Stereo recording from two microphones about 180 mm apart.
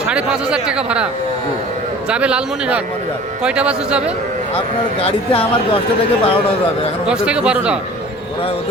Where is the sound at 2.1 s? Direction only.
5° right (ahead or behind).